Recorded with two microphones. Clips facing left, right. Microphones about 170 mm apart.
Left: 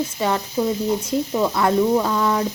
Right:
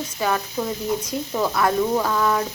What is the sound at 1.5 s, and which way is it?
Speech, 20° left (ahead or behind).